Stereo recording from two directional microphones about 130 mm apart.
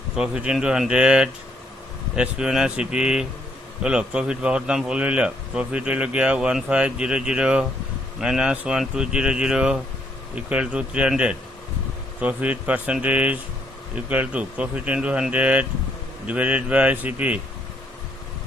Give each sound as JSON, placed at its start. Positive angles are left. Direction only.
{"t": 0.2, "sound": "a man's voice", "side_deg": -5}